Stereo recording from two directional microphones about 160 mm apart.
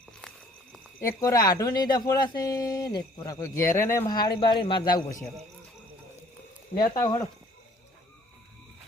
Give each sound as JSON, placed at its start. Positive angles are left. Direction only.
{"t": 0.2, "sound": "a sound", "side_deg": 5}
{"t": 1.0, "sound": "speech", "side_deg": 20}
{"t": 7.0, "sound": "speech", "side_deg": 25}